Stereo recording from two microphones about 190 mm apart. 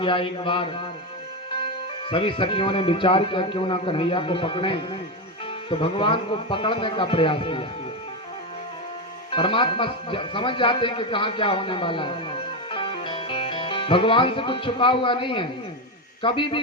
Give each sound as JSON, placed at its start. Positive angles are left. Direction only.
{"t": 0.0, "sound": "speech", "side_deg": 25}
{"t": 2.0, "sound": "speech", "side_deg": 25}
{"t": 9.3, "sound": "speech", "side_deg": 25}
{"t": 12.7, "sound": "music", "side_deg": 25}
{"t": 16.2, "sound": "speech", "side_deg": 25}